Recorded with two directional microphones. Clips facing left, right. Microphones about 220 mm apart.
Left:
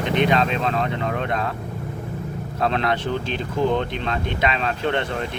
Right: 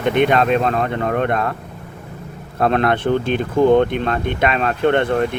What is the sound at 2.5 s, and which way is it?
Speech, 55° right (ahead or behind).